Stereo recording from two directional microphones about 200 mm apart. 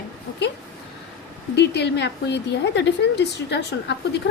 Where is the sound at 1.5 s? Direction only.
55° left (ahead or behind).